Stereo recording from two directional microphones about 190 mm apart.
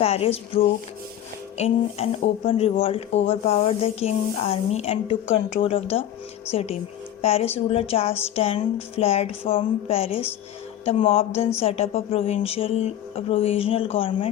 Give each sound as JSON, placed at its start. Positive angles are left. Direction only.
{"t": 0.0, "sound": "speech", "side_deg": 30}